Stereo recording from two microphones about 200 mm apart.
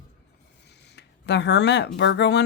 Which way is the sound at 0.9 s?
60° left (ahead or behind).